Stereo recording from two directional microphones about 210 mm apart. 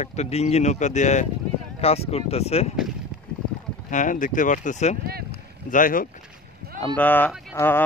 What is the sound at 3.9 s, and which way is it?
Speech, 40° left (ahead or behind).